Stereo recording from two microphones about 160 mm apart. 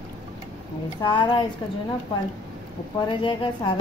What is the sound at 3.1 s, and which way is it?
Speech, 30° left (ahead or behind).